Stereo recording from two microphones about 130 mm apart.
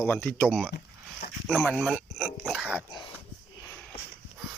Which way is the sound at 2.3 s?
5° right (ahead or behind).